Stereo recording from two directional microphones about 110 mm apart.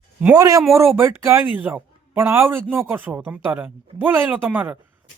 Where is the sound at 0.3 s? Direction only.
30° right (ahead or behind).